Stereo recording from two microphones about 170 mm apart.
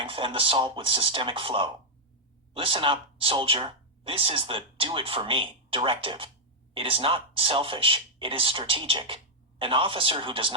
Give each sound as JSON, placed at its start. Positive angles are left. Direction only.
{"t": 0.0, "sound": "speech", "side_deg": -30}